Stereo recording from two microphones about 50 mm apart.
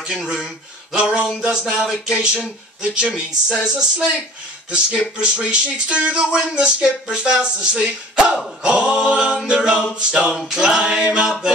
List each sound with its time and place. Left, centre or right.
0.0 s speech: centre